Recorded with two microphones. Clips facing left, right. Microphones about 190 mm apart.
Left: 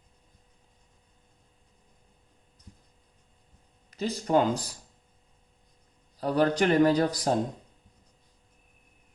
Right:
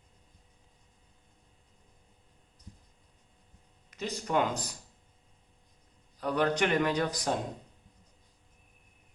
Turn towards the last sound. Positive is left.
turn(degrees=35)  # may be behind; listen again after turning